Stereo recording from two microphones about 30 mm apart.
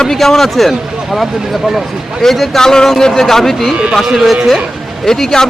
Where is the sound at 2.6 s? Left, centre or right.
Centre.